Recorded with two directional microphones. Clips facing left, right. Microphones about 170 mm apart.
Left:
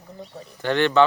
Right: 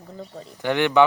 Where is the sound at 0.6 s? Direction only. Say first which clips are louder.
Even; 15° right (ahead or behind).